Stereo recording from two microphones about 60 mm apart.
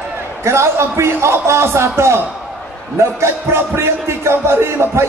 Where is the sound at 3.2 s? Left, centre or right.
Right.